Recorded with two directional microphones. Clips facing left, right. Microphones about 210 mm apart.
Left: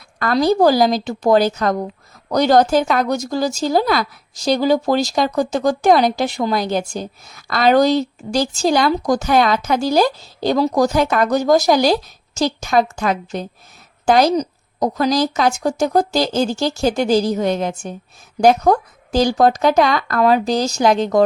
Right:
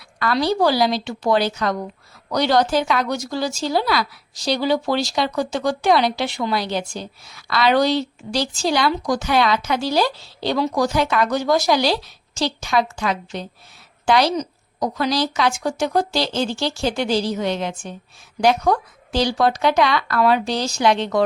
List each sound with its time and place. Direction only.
0.2 s speech: 45° left (ahead or behind)